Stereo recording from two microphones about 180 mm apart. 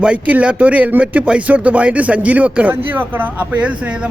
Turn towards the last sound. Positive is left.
turn(degrees=-5)  # may be behind; listen again after turning